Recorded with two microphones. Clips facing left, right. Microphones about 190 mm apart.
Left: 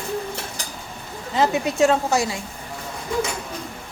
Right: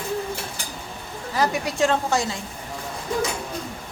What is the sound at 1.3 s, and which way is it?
Speech, 25° left (ahead or behind).